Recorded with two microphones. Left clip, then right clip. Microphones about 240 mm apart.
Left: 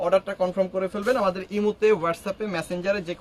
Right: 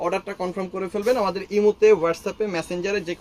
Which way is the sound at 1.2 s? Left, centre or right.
Left.